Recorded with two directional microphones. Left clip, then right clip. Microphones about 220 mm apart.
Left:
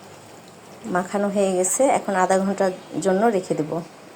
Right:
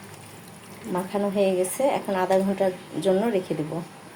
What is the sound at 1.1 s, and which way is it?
A woman's voice, 15° left (ahead or behind).